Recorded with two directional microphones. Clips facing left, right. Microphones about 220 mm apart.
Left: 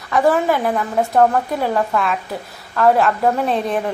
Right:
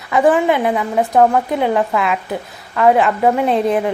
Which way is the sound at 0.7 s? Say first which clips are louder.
Right 2 dB; 5° right (ahead or behind).